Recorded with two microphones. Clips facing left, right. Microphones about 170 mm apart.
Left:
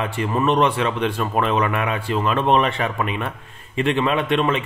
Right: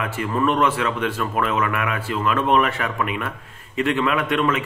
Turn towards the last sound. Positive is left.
turn(degrees=25)  # may be behind; listen again after turning